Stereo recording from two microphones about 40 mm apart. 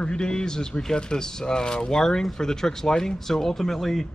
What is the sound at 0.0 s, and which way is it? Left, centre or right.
Speech, left.